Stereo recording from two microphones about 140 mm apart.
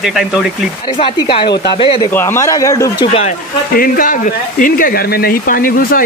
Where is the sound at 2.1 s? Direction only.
15° left (ahead or behind).